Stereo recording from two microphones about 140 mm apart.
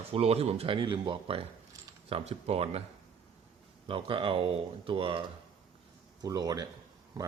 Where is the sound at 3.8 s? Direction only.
40° right (ahead or behind).